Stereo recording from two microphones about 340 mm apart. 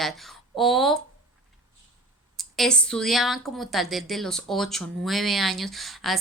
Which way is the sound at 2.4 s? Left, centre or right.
Centre.